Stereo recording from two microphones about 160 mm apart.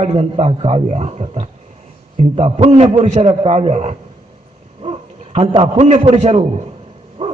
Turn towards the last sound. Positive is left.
turn(degrees=-40)  # may be behind; listen again after turning